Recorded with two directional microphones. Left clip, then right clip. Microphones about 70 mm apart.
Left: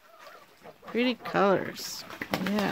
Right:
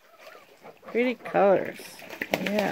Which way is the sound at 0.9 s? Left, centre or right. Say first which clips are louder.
Right 3 dB; left.